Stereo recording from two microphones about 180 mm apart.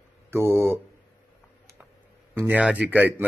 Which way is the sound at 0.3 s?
15° right (ahead or behind).